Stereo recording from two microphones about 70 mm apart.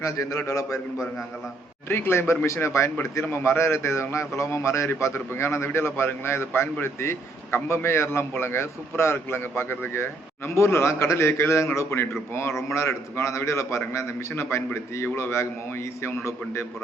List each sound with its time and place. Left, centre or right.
0.0 s a man's voice: left
1.9 s a man's voice: left